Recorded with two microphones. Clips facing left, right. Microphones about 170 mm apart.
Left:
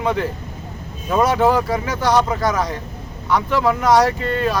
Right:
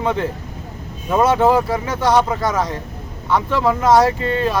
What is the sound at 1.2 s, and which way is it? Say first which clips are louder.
Speech: right 2 dB; 25° right (ahead or behind).